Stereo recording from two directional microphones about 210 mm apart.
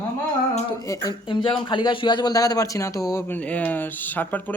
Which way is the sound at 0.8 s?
15° left (ahead or behind).